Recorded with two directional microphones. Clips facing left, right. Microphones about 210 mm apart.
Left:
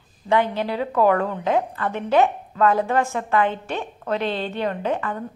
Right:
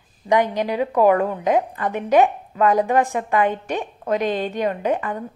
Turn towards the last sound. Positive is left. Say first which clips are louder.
# right 2 dB
turn(degrees=-15)  # may be behind; listen again after turning